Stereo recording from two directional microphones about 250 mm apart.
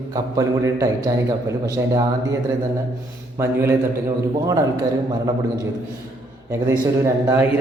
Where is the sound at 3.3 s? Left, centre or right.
Centre.